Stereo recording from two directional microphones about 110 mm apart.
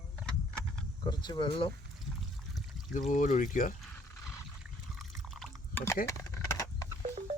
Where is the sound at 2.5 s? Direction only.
Centre (ahead or behind).